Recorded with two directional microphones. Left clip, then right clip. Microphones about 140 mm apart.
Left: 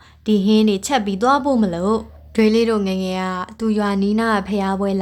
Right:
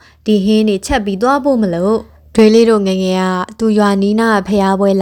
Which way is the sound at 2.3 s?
45° right (ahead or behind).